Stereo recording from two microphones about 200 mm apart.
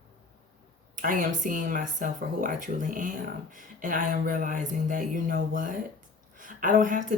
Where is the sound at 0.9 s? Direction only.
40° right (ahead or behind).